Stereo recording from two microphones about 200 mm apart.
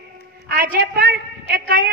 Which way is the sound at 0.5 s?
50° right (ahead or behind).